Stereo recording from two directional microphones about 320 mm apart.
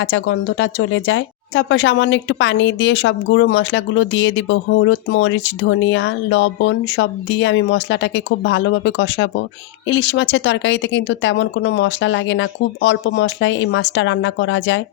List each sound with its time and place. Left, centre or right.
0.0 s speech: left